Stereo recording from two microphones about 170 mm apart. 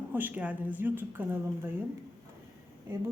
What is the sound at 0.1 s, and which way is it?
A woman's voice, 10° right (ahead or behind).